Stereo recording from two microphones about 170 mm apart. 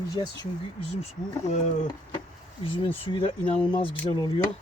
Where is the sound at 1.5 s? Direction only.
45° left (ahead or behind).